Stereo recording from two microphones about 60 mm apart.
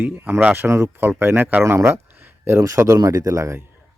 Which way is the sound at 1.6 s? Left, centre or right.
Right.